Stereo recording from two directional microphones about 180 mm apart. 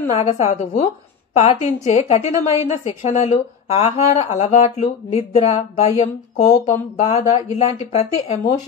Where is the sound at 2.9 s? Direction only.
40° left (ahead or behind).